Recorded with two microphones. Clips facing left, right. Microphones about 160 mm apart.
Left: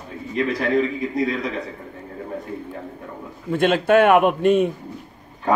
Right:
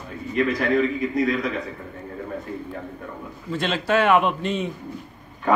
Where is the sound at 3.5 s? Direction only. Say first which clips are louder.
Left 6 dB; 55° left (ahead or behind).